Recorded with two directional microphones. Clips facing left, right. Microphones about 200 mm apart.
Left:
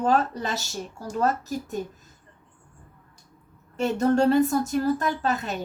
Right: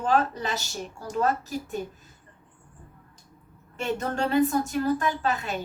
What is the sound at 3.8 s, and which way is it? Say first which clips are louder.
A woman's voice: left 7 dB; 40° left (ahead or behind).